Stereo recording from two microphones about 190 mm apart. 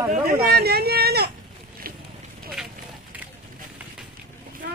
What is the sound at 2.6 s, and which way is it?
Run, 5° right (ahead or behind).